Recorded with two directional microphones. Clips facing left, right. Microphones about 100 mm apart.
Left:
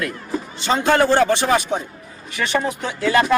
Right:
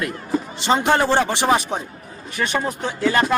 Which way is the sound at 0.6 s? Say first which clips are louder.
Left 2 dB; 25° right (ahead or behind).